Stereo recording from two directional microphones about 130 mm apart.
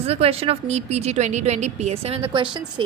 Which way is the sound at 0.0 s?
50° right (ahead or behind).